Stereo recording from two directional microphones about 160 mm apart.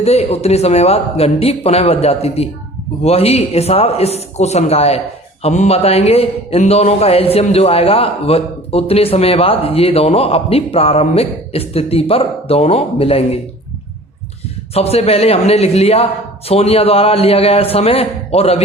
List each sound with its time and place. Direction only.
0.0 s a man's voice: 40° left (ahead or behind)
14.7 s a man's voice: 40° left (ahead or behind)